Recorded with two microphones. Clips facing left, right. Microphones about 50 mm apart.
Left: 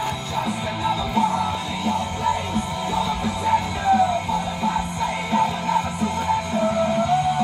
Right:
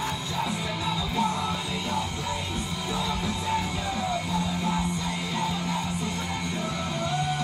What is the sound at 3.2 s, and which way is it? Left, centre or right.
Music, left.